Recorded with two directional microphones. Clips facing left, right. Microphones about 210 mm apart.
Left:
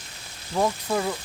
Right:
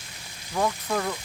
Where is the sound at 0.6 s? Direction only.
15° left (ahead or behind).